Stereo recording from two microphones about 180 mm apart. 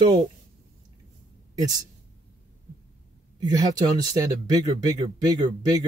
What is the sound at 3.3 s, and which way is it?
Speech, 20° right (ahead or behind).